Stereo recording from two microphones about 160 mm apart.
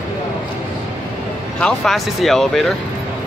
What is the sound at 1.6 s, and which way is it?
Speech, centre (ahead or behind).